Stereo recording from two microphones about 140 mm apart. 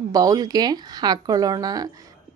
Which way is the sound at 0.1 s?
25° right (ahead or behind).